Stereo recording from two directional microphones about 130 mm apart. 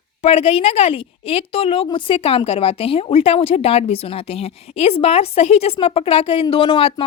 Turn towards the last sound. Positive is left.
turn(degrees=40)  # may be behind; listen again after turning